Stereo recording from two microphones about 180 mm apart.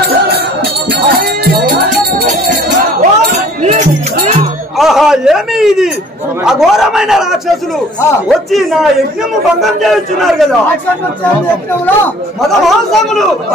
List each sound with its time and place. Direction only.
1.1 s music: 60° right (ahead or behind)
3.0 s chink: 40° right (ahead or behind)
4.7 s a man's voice: centre (ahead or behind)
12.4 s a man's voice: centre (ahead or behind)